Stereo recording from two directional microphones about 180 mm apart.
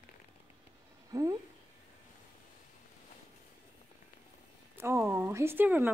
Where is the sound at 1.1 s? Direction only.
20° right (ahead or behind).